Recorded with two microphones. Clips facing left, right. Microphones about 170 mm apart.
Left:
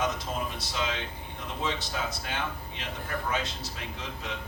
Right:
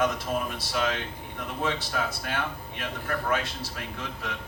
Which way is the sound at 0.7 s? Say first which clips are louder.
Right 5 dB; 55° right (ahead or behind).